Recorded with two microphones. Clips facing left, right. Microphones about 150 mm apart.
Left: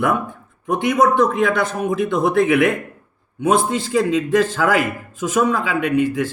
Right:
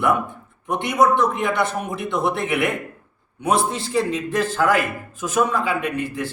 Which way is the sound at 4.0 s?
90° left.